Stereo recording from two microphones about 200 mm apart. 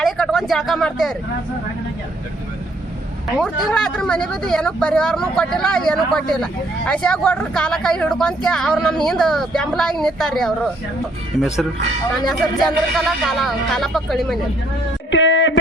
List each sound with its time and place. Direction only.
0.0 s speech: centre (ahead or behind)
3.3 s speech: 5° left (ahead or behind)
12.2 s speech: centre (ahead or behind)
15.1 s a sound: 65° left (ahead or behind)